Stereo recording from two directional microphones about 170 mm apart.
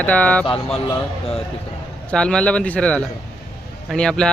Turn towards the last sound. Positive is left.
turn(degrees=5)  # may be behind; listen again after turning